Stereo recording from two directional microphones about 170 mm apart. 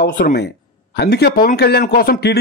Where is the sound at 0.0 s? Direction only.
70° left (ahead or behind).